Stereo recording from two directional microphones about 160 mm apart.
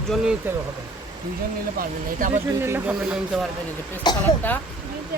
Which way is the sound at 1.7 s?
55° right (ahead or behind).